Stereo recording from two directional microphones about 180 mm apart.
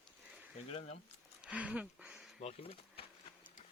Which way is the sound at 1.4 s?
5° right (ahead or behind).